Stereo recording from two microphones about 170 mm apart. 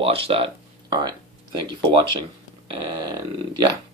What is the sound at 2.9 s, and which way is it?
Speech, 25° right (ahead or behind).